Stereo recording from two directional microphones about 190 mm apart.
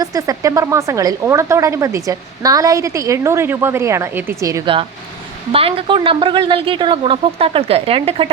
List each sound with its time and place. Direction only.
0.0 s a woman's voice: 20° right (ahead or behind)